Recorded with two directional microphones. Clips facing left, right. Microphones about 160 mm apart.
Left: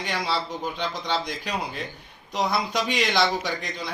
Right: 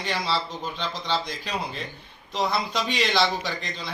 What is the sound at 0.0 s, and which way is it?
Speech, 15° left (ahead or behind).